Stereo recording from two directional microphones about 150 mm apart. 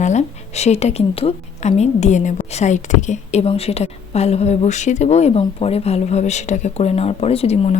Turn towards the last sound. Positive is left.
turn(degrees=45)  # may be behind; listen again after turning